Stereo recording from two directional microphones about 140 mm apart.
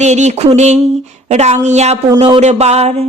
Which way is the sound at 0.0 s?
55° right (ahead or behind).